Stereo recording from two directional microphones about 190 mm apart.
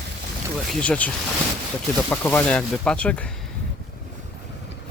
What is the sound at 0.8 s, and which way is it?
Speech, 5° left (ahead or behind).